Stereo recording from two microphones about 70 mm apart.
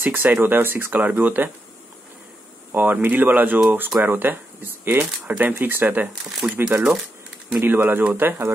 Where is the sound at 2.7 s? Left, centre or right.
Right.